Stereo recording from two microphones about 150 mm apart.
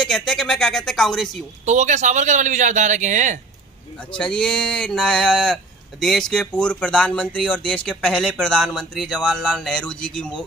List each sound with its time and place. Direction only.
0.0 s speech: 5° left (ahead or behind)
1.7 s speech: 55° right (ahead or behind)
4.2 s speech: 5° left (ahead or behind)